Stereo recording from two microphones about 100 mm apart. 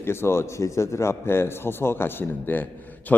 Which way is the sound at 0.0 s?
25° left (ahead or behind).